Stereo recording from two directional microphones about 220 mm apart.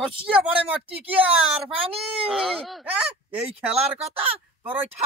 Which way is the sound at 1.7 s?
25° right (ahead or behind).